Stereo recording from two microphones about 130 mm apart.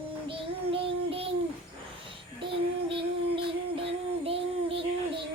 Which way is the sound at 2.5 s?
40° right (ahead or behind).